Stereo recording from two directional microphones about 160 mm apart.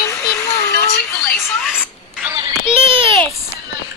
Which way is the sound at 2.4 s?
35° right (ahead or behind).